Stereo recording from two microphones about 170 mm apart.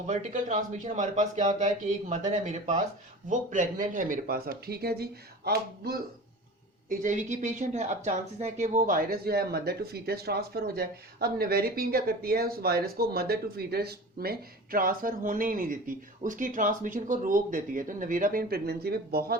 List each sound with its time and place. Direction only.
0.1 s speech: 45° right (ahead or behind); by 6.0 s 65° right (ahead or behind)
6.8 s speech: 45° right (ahead or behind); by 19.4 s 65° right (ahead or behind)